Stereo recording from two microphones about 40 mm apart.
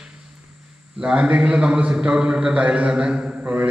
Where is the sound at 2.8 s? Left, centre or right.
Right.